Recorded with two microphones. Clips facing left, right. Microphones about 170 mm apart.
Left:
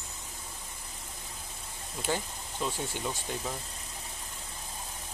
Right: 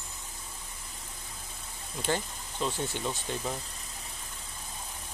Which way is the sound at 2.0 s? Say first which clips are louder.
Right 1 dB; 5° left (ahead or behind).